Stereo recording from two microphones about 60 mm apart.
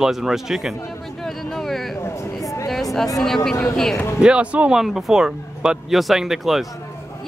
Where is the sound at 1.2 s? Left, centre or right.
Centre.